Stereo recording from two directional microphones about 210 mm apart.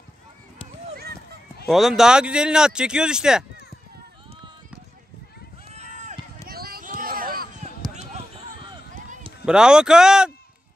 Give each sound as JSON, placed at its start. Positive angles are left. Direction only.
{"t": 1.7, "sound": "speech", "side_deg": 0}
{"t": 5.7, "sound": "run", "side_deg": -35}
{"t": 6.4, "sound": "a sound", "side_deg": -45}
{"t": 9.5, "sound": "speech", "side_deg": -5}